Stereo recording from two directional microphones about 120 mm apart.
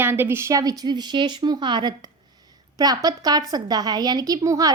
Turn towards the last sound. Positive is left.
turn(degrees=-30)  # may be behind; listen again after turning